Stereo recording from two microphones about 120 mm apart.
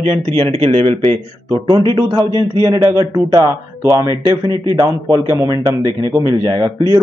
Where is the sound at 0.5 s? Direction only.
55° right (ahead or behind); by 4.1 s 30° right (ahead or behind).